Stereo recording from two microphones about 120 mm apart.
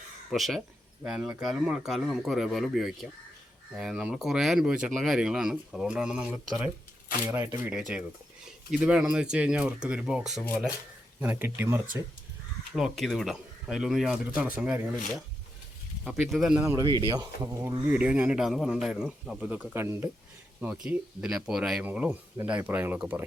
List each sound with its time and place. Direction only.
0.3 s speech: centre (ahead or behind)
7.3 s speech: 25° right (ahead or behind)
8.7 s speech: 10° right (ahead or behind)
12.7 s speech: centre (ahead or behind)
16.0 s speech: centre (ahead or behind)
16.8 s speech: 40° right (ahead or behind)
17.4 s speech: 25° right (ahead or behind)
17.8 s speech: 10° right (ahead or behind)